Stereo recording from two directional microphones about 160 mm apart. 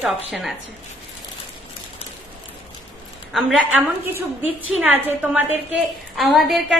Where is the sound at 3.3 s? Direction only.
Centre (ahead or behind).